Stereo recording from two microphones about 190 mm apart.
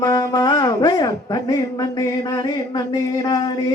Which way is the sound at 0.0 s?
20° left (ahead or behind).